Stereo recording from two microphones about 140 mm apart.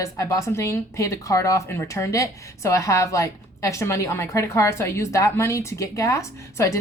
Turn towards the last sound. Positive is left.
turn(degrees=25)  # may be behind; listen again after turning